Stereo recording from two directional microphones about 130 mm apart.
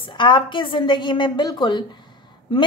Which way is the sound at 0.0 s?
35° left (ahead or behind).